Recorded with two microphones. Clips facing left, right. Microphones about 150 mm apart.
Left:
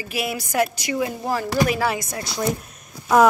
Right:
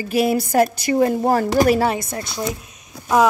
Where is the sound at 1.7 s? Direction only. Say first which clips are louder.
Right 4 dB; 25° right (ahead or behind).